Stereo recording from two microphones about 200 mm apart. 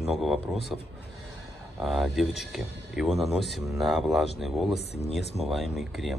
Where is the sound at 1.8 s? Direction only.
Centre (ahead or behind).